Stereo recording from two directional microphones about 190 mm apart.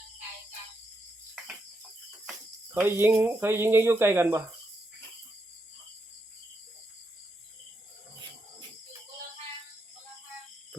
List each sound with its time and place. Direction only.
2.7 s speech: 10° right (ahead or behind)